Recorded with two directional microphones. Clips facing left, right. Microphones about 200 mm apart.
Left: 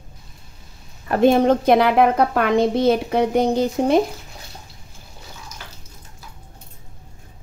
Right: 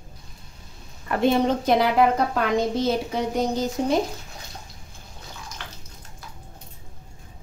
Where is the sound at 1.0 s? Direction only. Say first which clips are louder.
Left 6 dB; 45° left (ahead or behind); by 3.9 s 60° left (ahead or behind).